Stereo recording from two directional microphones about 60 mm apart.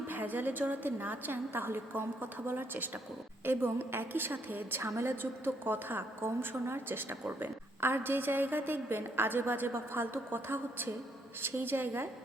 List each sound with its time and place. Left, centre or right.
0.1 s a woman's voice: right
4.8 s a woman's voice: right